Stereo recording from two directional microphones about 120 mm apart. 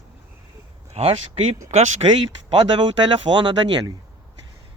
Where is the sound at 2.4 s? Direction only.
45° right (ahead or behind).